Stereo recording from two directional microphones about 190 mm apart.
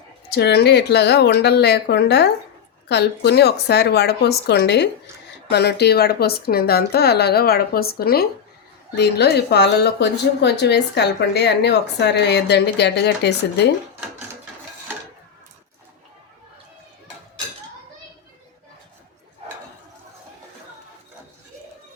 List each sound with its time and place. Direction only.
0.3 s speech: 60° left (ahead or behind)